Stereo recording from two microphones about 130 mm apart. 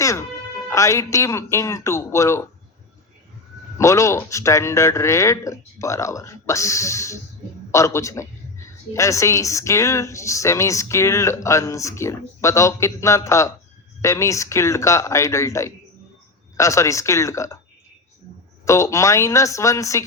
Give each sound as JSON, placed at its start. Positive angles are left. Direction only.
{"t": 0.0, "sound": "music", "side_deg": 25}
{"t": 0.7, "sound": "a woman's voice", "side_deg": 25}
{"t": 3.8, "sound": "a woman's voice", "side_deg": 25}
{"t": 18.6, "sound": "a woman's voice", "side_deg": 25}